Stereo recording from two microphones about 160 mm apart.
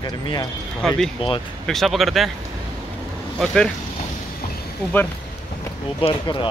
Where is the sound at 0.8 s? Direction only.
5° left (ahead or behind).